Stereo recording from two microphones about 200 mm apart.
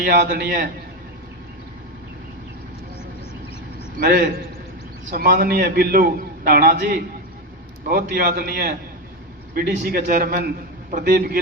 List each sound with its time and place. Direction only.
0.0 s a man's voice: 55° right (ahead or behind)
4.0 s a man's voice: 45° right (ahead or behind)